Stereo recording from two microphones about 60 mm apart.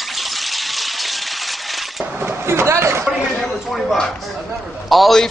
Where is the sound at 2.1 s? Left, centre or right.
Right.